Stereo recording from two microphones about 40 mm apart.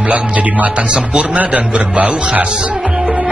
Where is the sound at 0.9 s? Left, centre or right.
Right.